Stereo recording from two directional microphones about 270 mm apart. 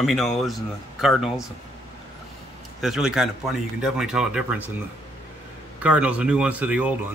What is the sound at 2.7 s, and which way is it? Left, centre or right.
Speech, centre.